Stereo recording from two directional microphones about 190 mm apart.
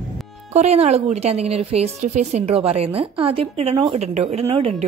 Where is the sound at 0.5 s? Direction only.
35° right (ahead or behind).